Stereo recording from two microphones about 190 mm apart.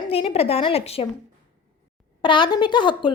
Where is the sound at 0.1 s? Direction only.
30° left (ahead or behind).